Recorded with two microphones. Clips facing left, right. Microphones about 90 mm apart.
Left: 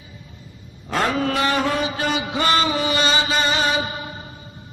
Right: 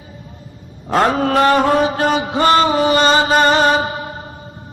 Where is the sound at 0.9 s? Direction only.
45° right (ahead or behind).